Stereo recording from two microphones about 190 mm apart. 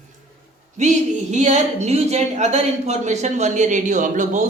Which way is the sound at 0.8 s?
35° right (ahead or behind).